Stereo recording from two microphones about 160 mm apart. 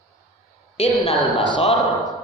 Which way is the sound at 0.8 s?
40° left (ahead or behind).